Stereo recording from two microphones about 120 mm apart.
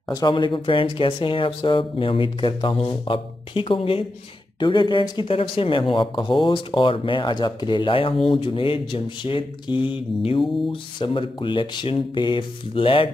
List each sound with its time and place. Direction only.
0.1 s speech: 40° left (ahead or behind)